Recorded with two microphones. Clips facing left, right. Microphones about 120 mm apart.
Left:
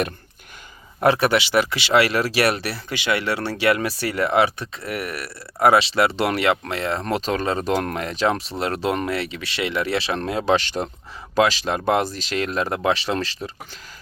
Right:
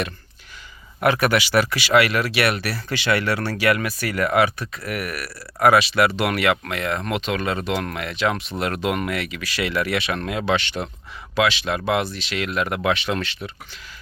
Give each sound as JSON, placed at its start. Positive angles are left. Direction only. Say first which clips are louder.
{"t": 1.0, "sound": "speech", "louder": "left 1 dB", "side_deg": 25}